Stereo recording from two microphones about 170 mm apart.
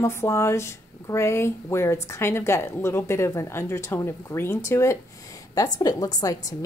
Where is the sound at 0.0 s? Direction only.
15° left (ahead or behind).